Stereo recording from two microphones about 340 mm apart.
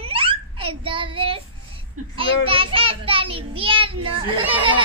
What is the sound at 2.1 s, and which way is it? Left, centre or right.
A child's voice, centre.